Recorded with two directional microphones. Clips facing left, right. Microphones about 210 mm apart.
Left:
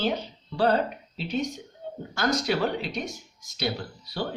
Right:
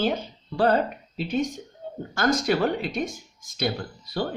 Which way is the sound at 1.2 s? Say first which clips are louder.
Right 3 dB; 50° right (ahead or behind).